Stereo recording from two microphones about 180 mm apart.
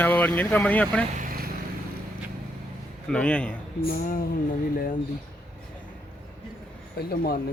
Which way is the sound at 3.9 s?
50° left (ahead or behind).